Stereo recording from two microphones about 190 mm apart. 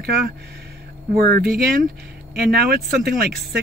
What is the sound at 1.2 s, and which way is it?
Speech, 55° right (ahead or behind).